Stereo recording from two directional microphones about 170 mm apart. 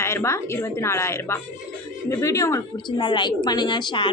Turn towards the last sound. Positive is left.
turn(degrees=25)  # may be behind; listen again after turning